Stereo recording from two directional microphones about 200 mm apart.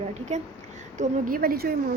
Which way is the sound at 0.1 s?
35° right (ahead or behind).